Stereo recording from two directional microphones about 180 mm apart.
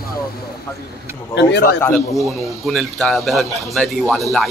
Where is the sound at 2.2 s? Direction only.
Centre (ahead or behind).